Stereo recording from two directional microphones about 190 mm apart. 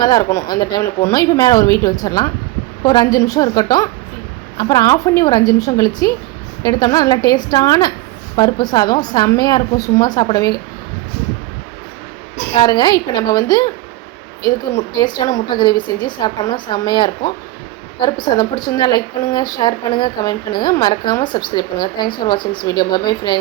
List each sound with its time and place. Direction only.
0.0 s a woman's voice: 20° left (ahead or behind)
12.5 s a woman's voice: 25° left (ahead or behind)